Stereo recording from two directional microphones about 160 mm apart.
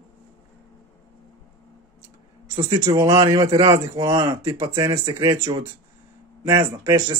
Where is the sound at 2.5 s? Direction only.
35° right (ahead or behind).